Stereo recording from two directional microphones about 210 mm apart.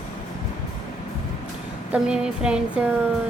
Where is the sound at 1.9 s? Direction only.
5° right (ahead or behind).